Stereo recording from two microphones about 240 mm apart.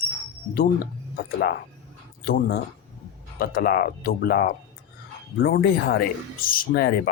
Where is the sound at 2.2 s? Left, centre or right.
Left.